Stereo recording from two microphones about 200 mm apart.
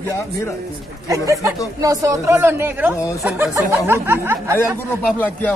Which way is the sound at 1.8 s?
15° right (ahead or behind).